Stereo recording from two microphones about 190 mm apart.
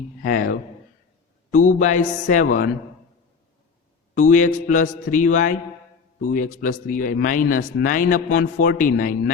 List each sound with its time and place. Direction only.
0.2 s speech: 50° left (ahead or behind)
4.1 s speech: 40° left (ahead or behind)